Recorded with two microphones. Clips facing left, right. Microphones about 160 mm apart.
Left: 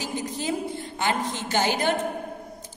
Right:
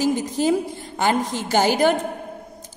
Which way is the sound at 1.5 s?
40° right (ahead or behind).